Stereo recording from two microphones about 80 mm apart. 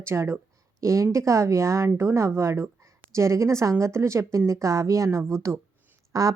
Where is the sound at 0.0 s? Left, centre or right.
Right.